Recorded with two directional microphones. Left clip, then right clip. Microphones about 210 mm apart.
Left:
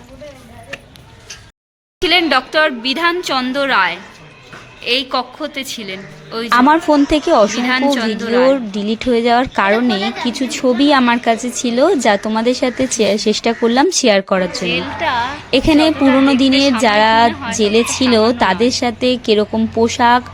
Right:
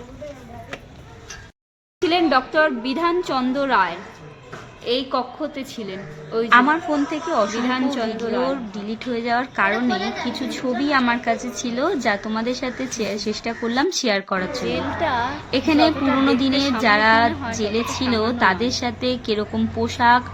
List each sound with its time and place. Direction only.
2.0 s a woman's voice: 5° left (ahead or behind)
6.5 s a woman's voice: 50° left (ahead or behind)
7.7 s a woman's voice: 5° left (ahead or behind)
8.4 s a woman's voice: 40° left (ahead or behind)
14.6 s a woman's voice: centre (ahead or behind)
15.4 s a woman's voice: 40° left (ahead or behind)